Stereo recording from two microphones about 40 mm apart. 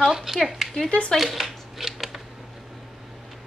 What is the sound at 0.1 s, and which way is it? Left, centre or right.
Speech, centre.